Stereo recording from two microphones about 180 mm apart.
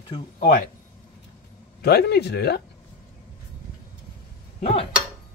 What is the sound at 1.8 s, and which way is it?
Speech, 65° left (ahead or behind).